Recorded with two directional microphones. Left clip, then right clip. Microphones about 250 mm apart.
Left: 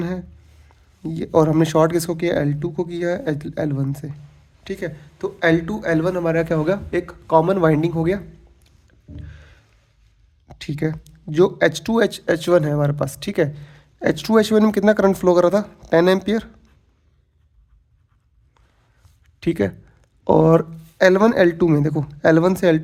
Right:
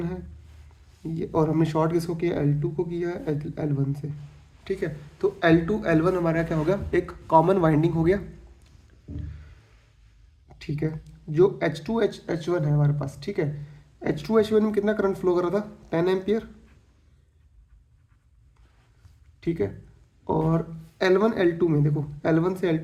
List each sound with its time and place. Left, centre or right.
1.0 s speech: left
4.6 s a man's voice: left
9.1 s a sound: left
10.5 s speech: left
19.4 s speech: left